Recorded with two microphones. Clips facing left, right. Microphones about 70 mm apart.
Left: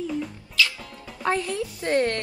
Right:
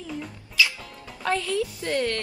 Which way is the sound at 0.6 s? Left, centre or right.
Centre.